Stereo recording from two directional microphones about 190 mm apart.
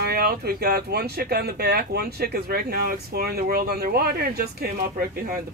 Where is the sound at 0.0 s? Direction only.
55° right (ahead or behind).